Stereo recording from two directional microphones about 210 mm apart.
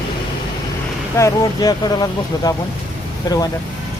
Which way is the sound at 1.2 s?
15° left (ahead or behind).